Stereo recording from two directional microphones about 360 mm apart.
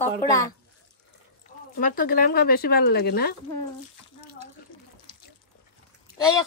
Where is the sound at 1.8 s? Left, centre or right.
Left.